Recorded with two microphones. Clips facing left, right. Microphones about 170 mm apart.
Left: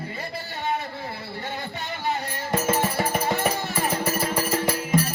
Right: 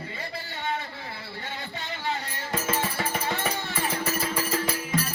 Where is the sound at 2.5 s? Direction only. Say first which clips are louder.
Left 5 dB; 40° left (ahead or behind).